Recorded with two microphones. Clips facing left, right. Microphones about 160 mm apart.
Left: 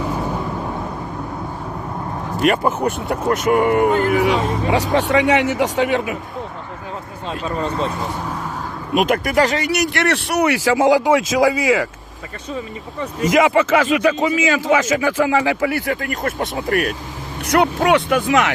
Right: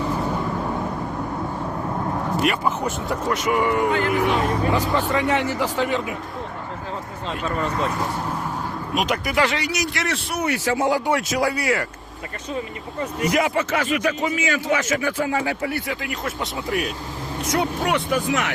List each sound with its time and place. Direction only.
2.5 s speech: 55° left (ahead or behind)
4.7 s speech: 80° left
7.4 s speech: 25° left (ahead or behind)
9.0 s speech: 50° left (ahead or behind)
9.6 s speech: 65° left (ahead or behind); by 11.9 s 90° left
13.2 s speech: 90° left
15.9 s speech: 50° left (ahead or behind)
17.4 s speech: 70° left (ahead or behind); by 18.5 s 90° left